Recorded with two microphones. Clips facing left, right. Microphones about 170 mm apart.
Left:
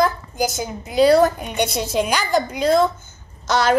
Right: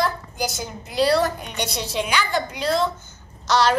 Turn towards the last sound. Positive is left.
turn(degrees=50)  # may be behind; listen again after turning